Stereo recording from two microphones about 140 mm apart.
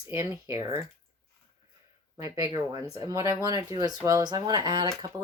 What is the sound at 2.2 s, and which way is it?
Speech, 25° right (ahead or behind).